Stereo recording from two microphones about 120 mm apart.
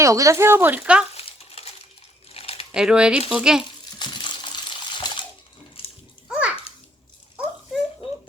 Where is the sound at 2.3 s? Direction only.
55° left (ahead or behind).